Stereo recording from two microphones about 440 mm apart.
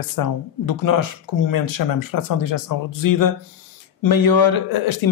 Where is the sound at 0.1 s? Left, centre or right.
Left.